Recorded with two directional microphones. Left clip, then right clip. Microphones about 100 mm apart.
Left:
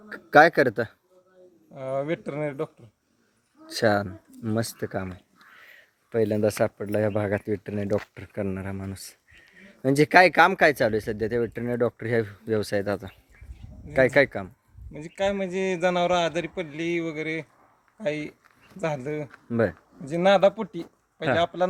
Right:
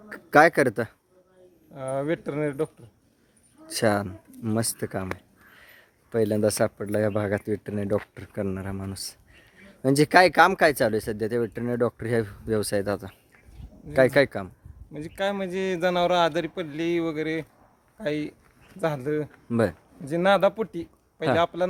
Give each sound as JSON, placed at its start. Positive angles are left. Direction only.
{"t": 0.1, "sound": "speech", "side_deg": -20}
{"t": 3.7, "sound": "a man's voice", "side_deg": -20}
{"t": 19.5, "sound": "speech", "side_deg": -35}
{"t": 20.1, "sound": "a man's voice", "side_deg": -15}